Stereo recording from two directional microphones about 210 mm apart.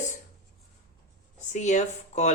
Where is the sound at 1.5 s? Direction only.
35° left (ahead or behind).